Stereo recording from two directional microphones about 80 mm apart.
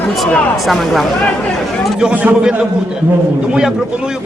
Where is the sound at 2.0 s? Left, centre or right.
Centre.